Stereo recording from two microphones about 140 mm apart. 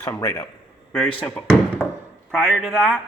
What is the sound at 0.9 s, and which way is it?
Speech, 5° left (ahead or behind).